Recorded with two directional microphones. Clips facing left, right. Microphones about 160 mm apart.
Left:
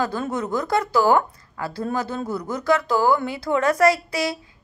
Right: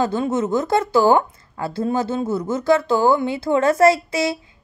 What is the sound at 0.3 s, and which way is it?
A woman's voice, 25° right (ahead or behind).